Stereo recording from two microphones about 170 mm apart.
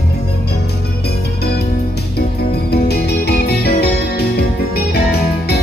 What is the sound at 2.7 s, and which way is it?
Music, 70° left (ahead or behind).